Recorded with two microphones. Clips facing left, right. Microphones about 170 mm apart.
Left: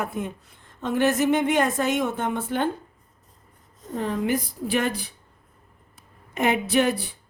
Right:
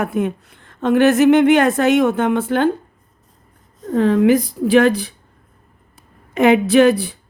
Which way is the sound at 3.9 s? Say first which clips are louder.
Right 12 dB; 90° right.